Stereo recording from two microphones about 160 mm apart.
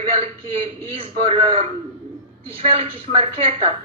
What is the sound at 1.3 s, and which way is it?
Speech, 40° right (ahead or behind).